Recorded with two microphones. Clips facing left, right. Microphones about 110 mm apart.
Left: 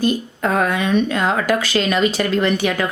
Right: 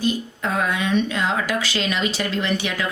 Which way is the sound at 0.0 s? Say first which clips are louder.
Left 4 dB; 50° left (ahead or behind).